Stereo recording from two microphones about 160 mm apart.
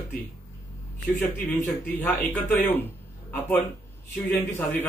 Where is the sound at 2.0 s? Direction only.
10° left (ahead or behind).